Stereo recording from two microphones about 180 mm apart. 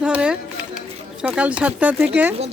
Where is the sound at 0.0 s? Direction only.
5° right (ahead or behind).